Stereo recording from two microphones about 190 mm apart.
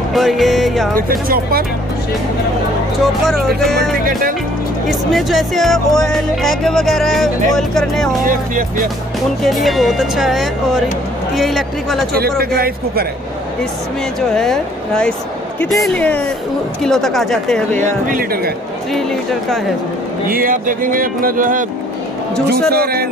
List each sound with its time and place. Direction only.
0.1 s music: centre (ahead or behind)
0.9 s speech: 50° right (ahead or behind)
3.0 s speech: centre (ahead or behind)
4.8 s speech: centre (ahead or behind)
8.3 s speech: 45° right (ahead or behind)
9.4 s speech: centre (ahead or behind)
12.1 s speech: 55° right (ahead or behind)
14.3 s speech: 5° left (ahead or behind)
17.7 s speech: 40° right (ahead or behind)
18.9 s speech: centre (ahead or behind)
20.2 s speech: 50° right (ahead or behind)
22.7 s speech: 55° right (ahead or behind)